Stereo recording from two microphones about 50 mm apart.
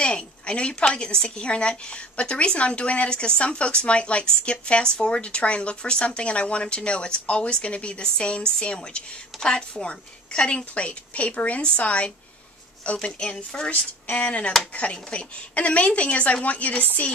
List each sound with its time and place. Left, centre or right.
0.0 s a woman's voice: centre
14.0 s a woman's voice: left